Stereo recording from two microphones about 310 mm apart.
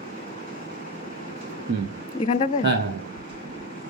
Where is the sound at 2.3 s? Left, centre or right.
Left.